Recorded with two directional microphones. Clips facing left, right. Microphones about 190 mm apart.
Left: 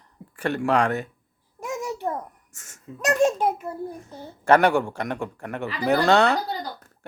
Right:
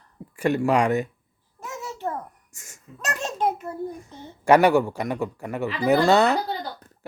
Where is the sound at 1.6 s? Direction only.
15° left (ahead or behind).